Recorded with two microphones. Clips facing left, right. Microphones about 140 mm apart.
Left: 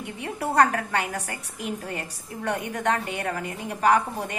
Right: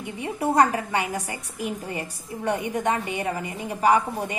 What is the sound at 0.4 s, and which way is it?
A woman's voice, 10° right (ahead or behind).